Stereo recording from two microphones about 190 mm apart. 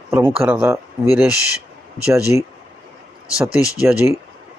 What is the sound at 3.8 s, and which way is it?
Speech, 10° right (ahead or behind).